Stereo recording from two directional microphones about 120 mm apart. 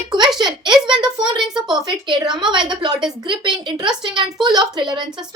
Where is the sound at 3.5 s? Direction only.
40° right (ahead or behind).